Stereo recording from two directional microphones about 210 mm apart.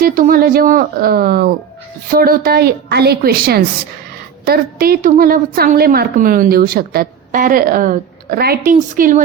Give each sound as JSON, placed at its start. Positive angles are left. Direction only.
{"t": 0.0, "sound": "a woman's voice", "side_deg": -40}